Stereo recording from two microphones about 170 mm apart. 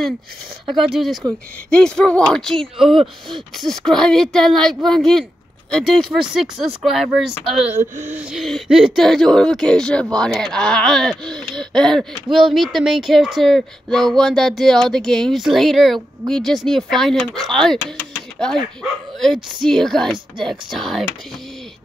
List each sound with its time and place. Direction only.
0.8 s speech: centre (ahead or behind)
3.0 s speech: 30° right (ahead or behind)
3.6 s speech: 5° left (ahead or behind)